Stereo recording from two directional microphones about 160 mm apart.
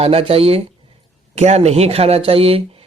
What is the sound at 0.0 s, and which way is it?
Speech, 40° right (ahead or behind).